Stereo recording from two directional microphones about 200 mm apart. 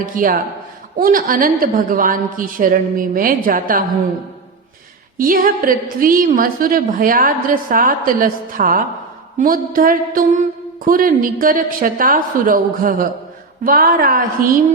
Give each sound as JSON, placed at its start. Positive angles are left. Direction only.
{"t": 0.0, "sound": "a woman's voice", "side_deg": -45}
{"t": 5.1, "sound": "a woman's voice", "side_deg": -45}